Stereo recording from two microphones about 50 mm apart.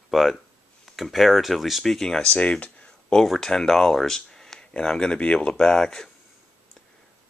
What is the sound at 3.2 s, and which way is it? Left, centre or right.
Speech, centre.